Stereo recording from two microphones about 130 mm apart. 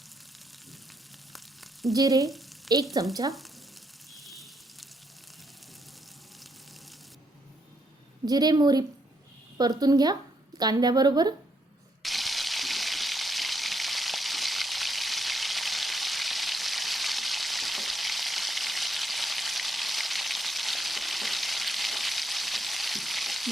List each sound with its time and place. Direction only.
1.3 s frying: centre (ahead or behind)
2.0 s frying: 25° right (ahead or behind)
2.7 s frying: centre (ahead or behind)
3.2 s a woman's voice: 30° right (ahead or behind)
4.1 s a sound: centre (ahead or behind)
8.3 s a woman's voice: 30° right (ahead or behind)
12.0 s frying: centre (ahead or behind)